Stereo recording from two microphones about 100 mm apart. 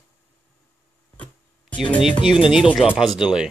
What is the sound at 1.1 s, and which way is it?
Guitar, 10° left (ahead or behind).